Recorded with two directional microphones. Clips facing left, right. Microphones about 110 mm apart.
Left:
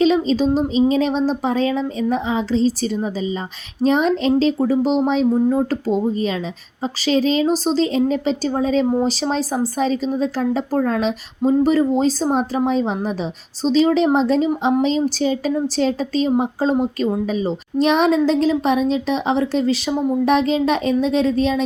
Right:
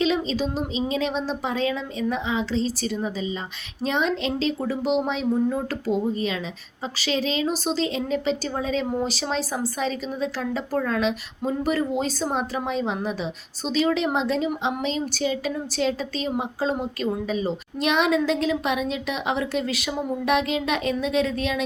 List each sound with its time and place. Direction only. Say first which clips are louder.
0.0 s a woman's voice: left 7 dB; 40° left (ahead or behind)